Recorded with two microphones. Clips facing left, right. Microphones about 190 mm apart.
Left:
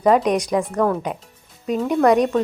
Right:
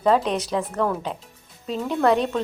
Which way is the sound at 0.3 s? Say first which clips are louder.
Left 5 dB; 15° left (ahead or behind).